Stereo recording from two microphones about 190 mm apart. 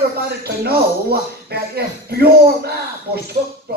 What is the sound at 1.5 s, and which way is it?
Speech, 60° right (ahead or behind).